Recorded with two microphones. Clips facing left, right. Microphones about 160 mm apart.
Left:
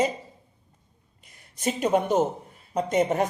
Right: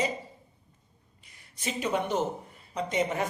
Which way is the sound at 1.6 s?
50° left (ahead or behind).